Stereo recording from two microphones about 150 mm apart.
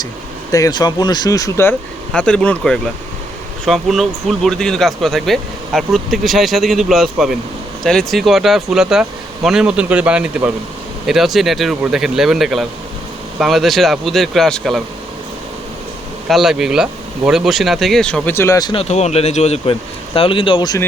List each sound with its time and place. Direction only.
0.5 s speech: 25° left (ahead or behind)
2.1 s speech: 5° left (ahead or behind)
16.3 s speech: centre (ahead or behind); by 18.7 s 20° left (ahead or behind)
18.7 s speech: 45° left (ahead or behind)
20.1 s speech: 35° left (ahead or behind)